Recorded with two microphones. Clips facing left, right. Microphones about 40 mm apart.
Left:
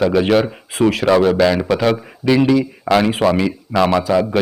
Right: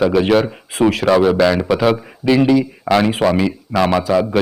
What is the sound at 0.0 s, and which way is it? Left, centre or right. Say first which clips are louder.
Speech: right 1 dB; centre.